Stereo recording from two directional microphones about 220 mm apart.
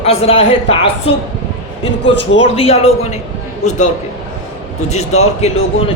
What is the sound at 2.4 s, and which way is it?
A woman's voice, 25° left (ahead or behind).